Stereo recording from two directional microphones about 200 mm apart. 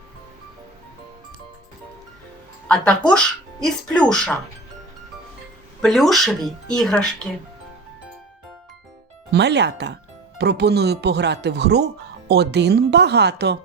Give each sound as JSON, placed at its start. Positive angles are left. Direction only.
{"t": 2.6, "sound": "speech", "side_deg": 5}
{"t": 5.8, "sound": "speech", "side_deg": 0}
{"t": 9.3, "sound": "speech", "side_deg": -55}